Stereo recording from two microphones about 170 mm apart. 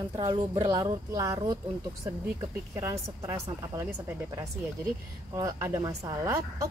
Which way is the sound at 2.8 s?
15° right (ahead or behind).